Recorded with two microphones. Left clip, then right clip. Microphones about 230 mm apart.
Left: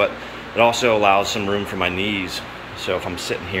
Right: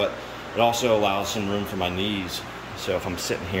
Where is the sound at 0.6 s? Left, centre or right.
Centre.